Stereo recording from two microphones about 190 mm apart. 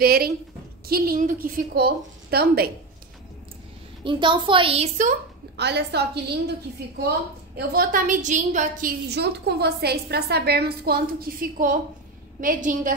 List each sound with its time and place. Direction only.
0.0 s a woman's voice: 50° right (ahead or behind)
4.0 s a woman's voice: 25° right (ahead or behind)
5.6 s a woman's voice: 65° right (ahead or behind); by 8.9 s 40° right (ahead or behind)
9.1 s a woman's voice: 60° right (ahead or behind); by 12.9 s 45° right (ahead or behind)